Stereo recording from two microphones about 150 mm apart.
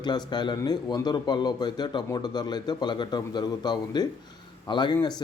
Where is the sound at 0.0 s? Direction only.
30° left (ahead or behind).